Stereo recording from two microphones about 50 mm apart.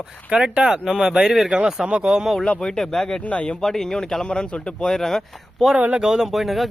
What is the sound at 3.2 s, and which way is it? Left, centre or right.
Speech, left.